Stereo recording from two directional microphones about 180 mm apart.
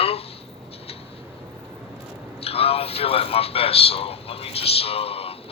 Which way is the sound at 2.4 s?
35° left (ahead or behind).